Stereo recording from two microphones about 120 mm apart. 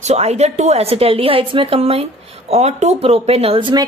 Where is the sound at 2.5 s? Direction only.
65° right (ahead or behind); by 3.8 s 40° right (ahead or behind).